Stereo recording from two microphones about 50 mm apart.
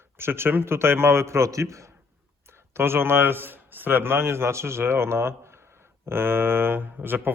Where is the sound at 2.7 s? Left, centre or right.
Right.